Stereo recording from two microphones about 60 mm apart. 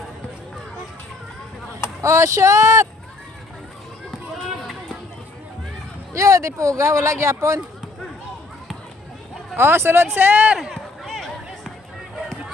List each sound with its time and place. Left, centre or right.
2.0 s speech: right
6.1 s speech: right
9.6 s speech: right
10.6 s a sound: centre